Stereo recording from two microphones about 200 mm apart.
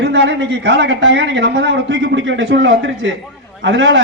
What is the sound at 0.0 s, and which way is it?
A man's voice, 60° right (ahead or behind).